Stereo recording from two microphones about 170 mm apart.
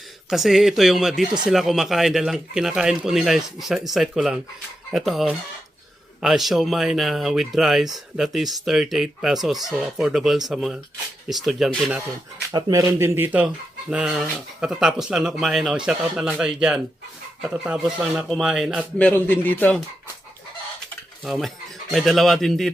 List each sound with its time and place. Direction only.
0.3 s speech: centre (ahead or behind)
12.5 s speech: 20° right (ahead or behind); by 18.9 s 5° right (ahead or behind)
18.9 s a man's voice: 10° left (ahead or behind)
21.2 s speech: centre (ahead or behind)